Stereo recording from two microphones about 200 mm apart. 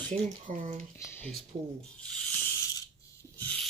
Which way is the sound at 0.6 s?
35° right (ahead or behind).